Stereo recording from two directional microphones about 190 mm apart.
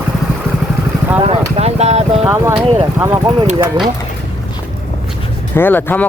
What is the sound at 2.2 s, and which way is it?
Speech, 5° right (ahead or behind).